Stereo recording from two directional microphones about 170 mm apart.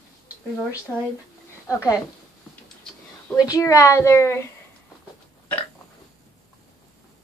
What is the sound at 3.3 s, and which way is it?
Speech, 20° left (ahead or behind).